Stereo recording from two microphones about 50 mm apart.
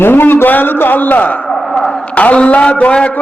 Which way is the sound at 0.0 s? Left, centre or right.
Left.